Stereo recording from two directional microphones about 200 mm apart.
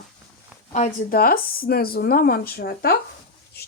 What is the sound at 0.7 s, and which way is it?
Speech, 40° left (ahead or behind).